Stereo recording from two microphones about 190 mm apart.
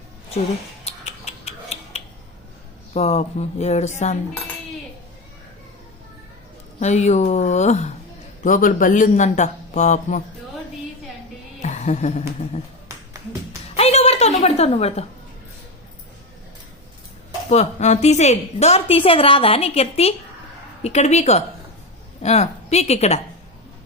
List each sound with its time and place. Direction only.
0.9 s a sound: 35° left (ahead or behind)
2.9 s a woman's voice: 35° left (ahead or behind)
6.7 s a woman's voice: 35° left (ahead or behind)
11.6 s music: 40° left (ahead or behind)
13.7 s a sound: 35° left (ahead or behind)
17.5 s a woman's voice: 35° left (ahead or behind)